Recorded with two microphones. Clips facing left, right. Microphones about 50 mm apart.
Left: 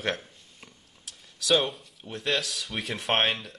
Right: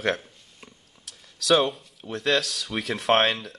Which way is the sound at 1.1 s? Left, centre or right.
Right.